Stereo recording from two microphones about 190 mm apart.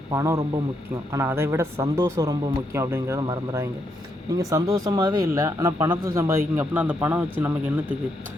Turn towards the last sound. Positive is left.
turn(degrees=-10)  # may be behind; listen again after turning